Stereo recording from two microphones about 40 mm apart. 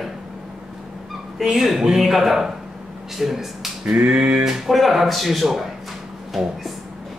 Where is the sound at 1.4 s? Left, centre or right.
Centre.